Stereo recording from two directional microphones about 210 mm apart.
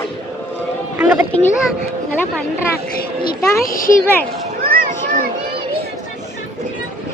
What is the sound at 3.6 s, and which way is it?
Speech, 40° left (ahead or behind).